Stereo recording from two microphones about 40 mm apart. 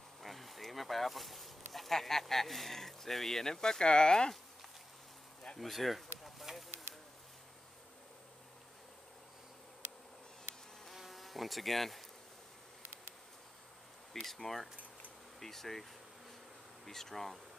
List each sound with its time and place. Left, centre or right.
0.2 s speech: centre; by 4.3 s left
5.6 s a sound: centre
11.0 s insect: centre
14.2 s speech: centre